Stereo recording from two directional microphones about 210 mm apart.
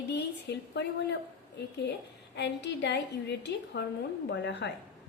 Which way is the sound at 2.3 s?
55° left (ahead or behind).